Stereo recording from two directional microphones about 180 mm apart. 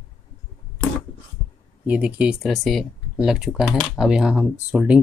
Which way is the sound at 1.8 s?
5° right (ahead or behind).